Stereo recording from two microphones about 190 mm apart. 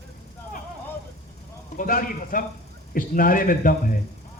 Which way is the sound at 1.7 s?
45° left (ahead or behind).